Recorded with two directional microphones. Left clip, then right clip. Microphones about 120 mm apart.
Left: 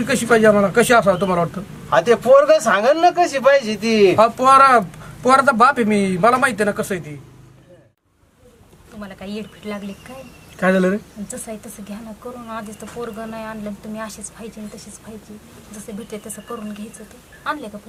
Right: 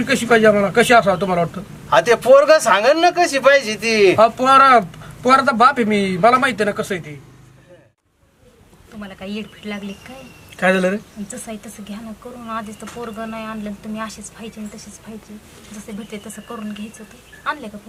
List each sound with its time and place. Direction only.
0.0 s speech: 15° left (ahead or behind)
1.9 s speech: 15° right (ahead or behind)
4.2 s speech: 15° left (ahead or behind)
9.0 s speech: 15° left (ahead or behind)
10.6 s speech: 5° right (ahead or behind)
11.3 s speech: 10° left (ahead or behind)
13.0 s speech: 10° left (ahead or behind)
16.1 s a woman's voice: 15° left (ahead or behind)